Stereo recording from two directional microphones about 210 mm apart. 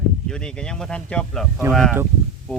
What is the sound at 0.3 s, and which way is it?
Speech, 5° left (ahead or behind).